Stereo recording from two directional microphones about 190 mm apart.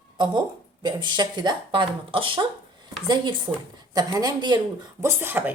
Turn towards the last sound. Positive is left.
turn(degrees=-10)  # may be behind; listen again after turning